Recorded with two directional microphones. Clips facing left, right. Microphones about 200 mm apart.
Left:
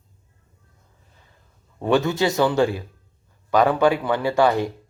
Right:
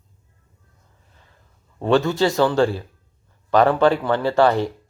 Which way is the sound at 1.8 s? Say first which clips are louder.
Right 2 dB; 15° left (ahead or behind).